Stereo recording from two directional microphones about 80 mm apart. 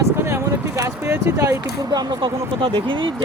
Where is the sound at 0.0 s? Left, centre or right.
Right.